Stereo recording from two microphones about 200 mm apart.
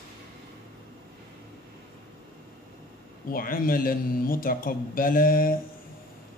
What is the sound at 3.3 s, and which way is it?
Speech, 45° left (ahead or behind).